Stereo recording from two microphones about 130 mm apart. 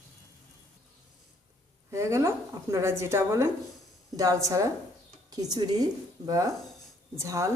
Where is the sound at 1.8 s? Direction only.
20° right (ahead or behind).